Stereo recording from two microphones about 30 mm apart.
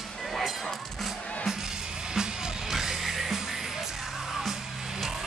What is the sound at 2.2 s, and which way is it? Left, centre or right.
Music, centre.